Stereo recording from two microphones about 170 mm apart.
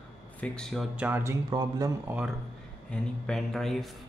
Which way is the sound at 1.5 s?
25° right (ahead or behind).